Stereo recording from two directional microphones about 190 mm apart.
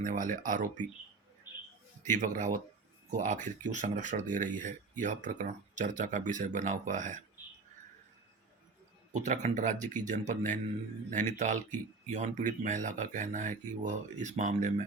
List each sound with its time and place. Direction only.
0.0 s speech: 45° right (ahead or behind)
2.0 s speech: 40° right (ahead or behind)
9.1 s speech: 40° right (ahead or behind)